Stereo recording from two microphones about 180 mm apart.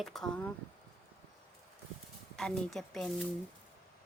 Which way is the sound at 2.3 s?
Centre (ahead or behind).